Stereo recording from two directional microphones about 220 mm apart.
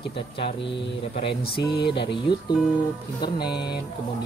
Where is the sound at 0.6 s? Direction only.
55° left (ahead or behind).